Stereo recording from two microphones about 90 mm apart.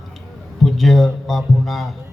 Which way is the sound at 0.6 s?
Centre (ahead or behind).